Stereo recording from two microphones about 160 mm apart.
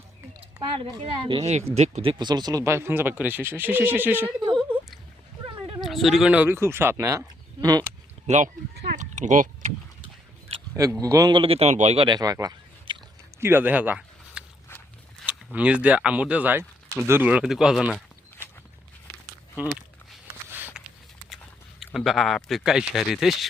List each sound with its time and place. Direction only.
1.0 s speech: 35° right (ahead or behind); by 4.4 s 10° right (ahead or behind)
5.8 s speech: centre (ahead or behind); by 7.9 s 25° right (ahead or behind)
8.3 s speech: 45° right (ahead or behind)
8.7 s a sound: 90° right
9.0 s vehicle: 50° right (ahead or behind)
10.5 s a sound: 40° right (ahead or behind)
11.0 s speech: 20° right (ahead or behind); by 12.0 s 45° right (ahead or behind)
12.0 s a sound: 25° right (ahead or behind)
13.4 s speech: 15° right (ahead or behind)
15.2 s zipper: centre (ahead or behind)
15.5 s speech: 10° right (ahead or behind)
19.5 s walk: 5° right (ahead or behind)
20.8 s a sound: 5° right (ahead or behind)
21.8 s speech: centre (ahead or behind)